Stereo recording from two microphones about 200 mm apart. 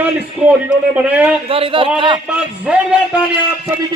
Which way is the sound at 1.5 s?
25° right (ahead or behind).